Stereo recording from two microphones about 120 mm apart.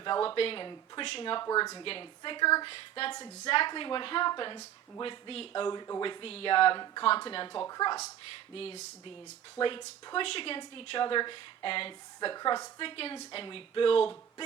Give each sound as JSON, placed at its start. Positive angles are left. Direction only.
{"t": 0.0, "sound": "a woman's voice", "side_deg": 40}
{"t": 1.5, "sound": "speech", "side_deg": 30}
{"t": 1.8, "sound": "a woman's voice", "side_deg": 45}
{"t": 5.6, "sound": "a woman's voice", "side_deg": 35}
{"t": 8.5, "sound": "speech", "side_deg": 60}
{"t": 9.6, "sound": "a woman's voice", "side_deg": 45}
{"t": 12.8, "sound": "a woman's voice", "side_deg": 50}